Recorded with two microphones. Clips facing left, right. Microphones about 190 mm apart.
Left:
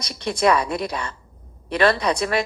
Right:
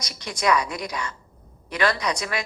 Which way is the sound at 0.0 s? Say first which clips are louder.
Left 6 dB; 60° left (ahead or behind).